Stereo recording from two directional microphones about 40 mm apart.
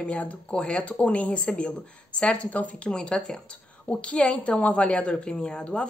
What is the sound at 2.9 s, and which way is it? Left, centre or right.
Speech, left.